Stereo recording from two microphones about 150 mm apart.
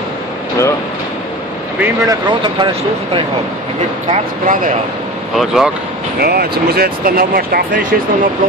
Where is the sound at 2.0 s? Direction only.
30° right (ahead or behind).